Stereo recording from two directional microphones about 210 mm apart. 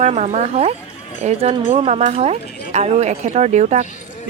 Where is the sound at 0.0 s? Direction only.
35° right (ahead or behind).